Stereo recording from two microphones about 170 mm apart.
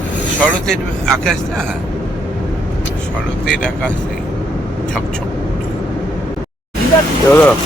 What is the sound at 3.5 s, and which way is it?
Speech, 5° left (ahead or behind).